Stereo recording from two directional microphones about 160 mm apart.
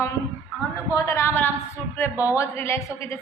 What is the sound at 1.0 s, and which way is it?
A woman's voice, 15° left (ahead or behind).